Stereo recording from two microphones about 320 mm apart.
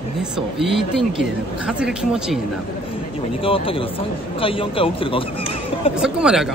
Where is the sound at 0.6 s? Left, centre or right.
Centre.